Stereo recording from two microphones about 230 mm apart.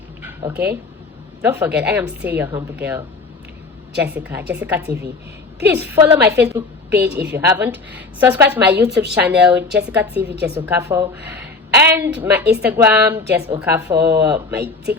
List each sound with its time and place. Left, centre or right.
0.2 s a sound: centre
1.4 s a woman's voice: centre
7.0 s a woman's voice: right
7.3 s a woman's voice: centre